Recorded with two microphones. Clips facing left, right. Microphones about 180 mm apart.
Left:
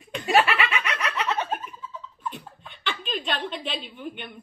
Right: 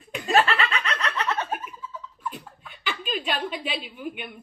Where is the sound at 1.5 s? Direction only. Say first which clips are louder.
Left 1 dB; centre (ahead or behind).